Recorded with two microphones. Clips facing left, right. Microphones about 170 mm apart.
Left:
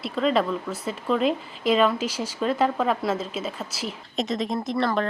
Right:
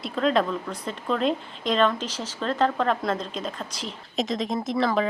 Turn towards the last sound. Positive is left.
turn(degrees=0)  # may be behind; listen again after turning